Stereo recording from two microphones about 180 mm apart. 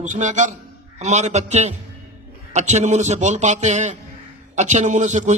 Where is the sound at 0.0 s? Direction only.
45° right (ahead or behind).